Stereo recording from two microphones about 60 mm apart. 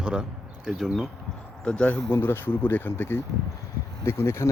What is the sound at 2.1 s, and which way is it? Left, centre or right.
Speech, left.